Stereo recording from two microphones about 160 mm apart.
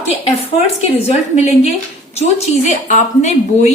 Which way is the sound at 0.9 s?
40° left (ahead or behind).